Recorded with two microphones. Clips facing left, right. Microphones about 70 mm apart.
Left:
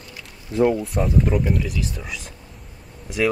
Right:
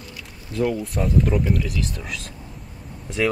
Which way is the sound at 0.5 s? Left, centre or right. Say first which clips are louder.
Left 4 dB; left.